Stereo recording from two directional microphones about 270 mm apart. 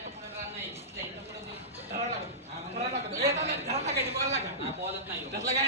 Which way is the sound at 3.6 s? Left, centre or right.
Right.